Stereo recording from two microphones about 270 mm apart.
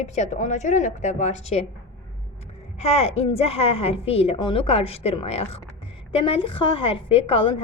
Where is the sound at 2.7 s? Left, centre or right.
Left.